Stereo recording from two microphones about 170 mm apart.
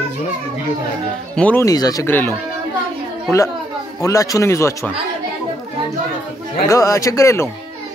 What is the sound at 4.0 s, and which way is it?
Speech, 20° left (ahead or behind).